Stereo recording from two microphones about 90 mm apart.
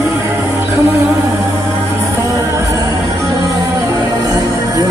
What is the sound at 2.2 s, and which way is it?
Music, 40° right (ahead or behind).